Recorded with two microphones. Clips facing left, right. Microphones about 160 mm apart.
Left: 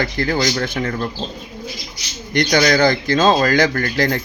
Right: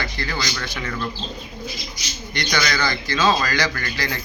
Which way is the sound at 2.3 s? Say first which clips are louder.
Left 9 dB; 50° left (ahead or behind).